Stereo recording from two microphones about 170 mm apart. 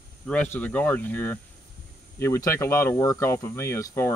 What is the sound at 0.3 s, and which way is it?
Speech, 10° left (ahead or behind).